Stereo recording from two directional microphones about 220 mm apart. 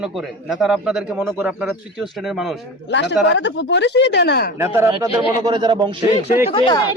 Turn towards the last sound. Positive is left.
turn(degrees=20)  # may be behind; listen again after turning